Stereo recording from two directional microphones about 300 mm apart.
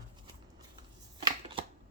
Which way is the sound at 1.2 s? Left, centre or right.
Centre.